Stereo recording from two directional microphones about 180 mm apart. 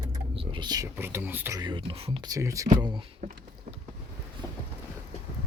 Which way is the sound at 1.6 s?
30° right (ahead or behind).